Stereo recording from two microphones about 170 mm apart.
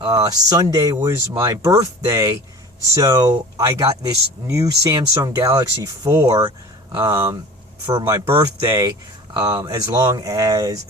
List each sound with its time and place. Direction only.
0.0 s speech: 20° right (ahead or behind)